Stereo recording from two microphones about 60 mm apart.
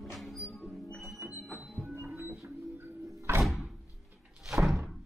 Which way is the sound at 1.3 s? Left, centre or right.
Right.